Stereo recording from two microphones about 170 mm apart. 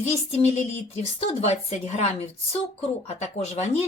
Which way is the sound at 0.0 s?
40° left (ahead or behind).